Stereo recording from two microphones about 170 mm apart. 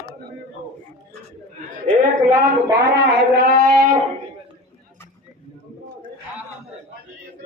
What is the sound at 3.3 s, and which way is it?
Speech, 65° right (ahead or behind).